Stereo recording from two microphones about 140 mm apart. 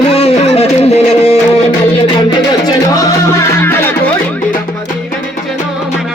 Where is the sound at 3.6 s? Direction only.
15° left (ahead or behind).